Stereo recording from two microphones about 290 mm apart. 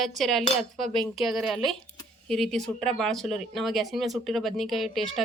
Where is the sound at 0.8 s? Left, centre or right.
Centre.